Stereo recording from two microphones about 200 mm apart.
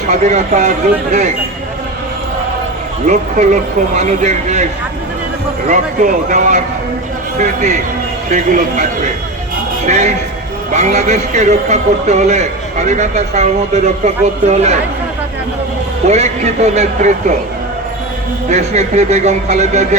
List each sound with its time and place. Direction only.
0.1 s a man's voice: 35° right (ahead or behind)
3.1 s a man's voice: 35° right (ahead or behind)
5.6 s a man's voice: 40° right (ahead or behind)
16.0 s a man's voice: 35° right (ahead or behind)
18.4 s a man's voice: 35° right (ahead or behind)